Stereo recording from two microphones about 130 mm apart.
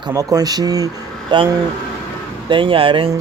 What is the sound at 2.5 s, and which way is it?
Speech, 45° right (ahead or behind).